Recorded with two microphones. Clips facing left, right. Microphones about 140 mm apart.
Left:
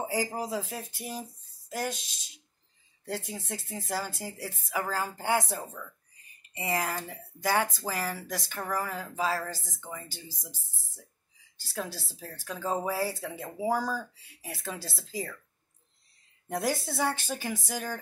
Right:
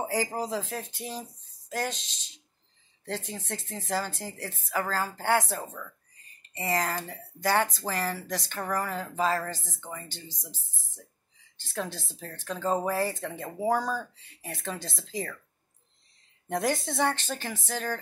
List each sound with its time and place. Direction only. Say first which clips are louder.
0.0 s speech: right 2 dB; 10° left (ahead or behind)
10.2 s speech: right 1 dB; 15° right (ahead or behind)
10.5 s speech: right 2 dB; 10° left (ahead or behind)
16.4 s speech: right 2 dB; 5° left (ahead or behind)